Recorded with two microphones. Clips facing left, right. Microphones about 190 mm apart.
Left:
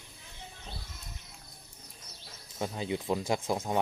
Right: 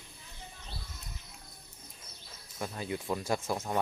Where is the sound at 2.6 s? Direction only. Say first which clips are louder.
Left 3 dB; 20° left (ahead or behind).